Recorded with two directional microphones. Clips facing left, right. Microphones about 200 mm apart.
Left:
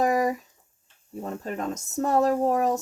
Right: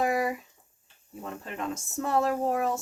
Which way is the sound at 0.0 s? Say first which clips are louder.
Left 4 dB; 40° left (ahead or behind).